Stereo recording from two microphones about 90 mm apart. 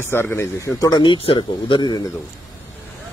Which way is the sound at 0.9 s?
60° left (ahead or behind).